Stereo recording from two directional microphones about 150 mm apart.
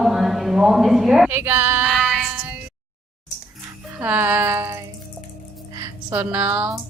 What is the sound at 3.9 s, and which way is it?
A woman's voice, 10° right (ahead or behind).